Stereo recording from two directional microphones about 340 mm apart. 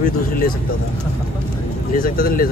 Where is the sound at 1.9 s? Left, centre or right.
Centre.